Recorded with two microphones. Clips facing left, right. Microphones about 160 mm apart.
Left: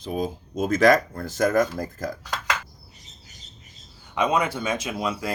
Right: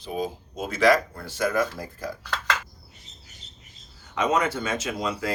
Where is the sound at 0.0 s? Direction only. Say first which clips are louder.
Left 2 dB; 45° left (ahead or behind).